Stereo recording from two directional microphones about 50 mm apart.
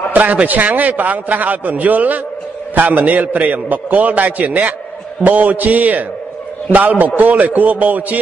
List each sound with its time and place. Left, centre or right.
0.1 s a man's voice: right